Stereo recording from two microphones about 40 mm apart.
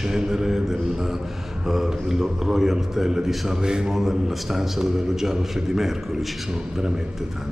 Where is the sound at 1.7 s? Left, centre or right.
Centre.